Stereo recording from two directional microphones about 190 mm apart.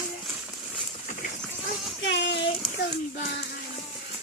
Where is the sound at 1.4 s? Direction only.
Centre (ahead or behind).